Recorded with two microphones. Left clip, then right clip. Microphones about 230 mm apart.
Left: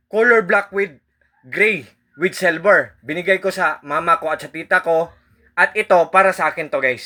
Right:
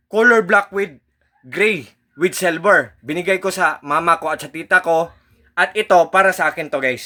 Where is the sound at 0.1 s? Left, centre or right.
Centre.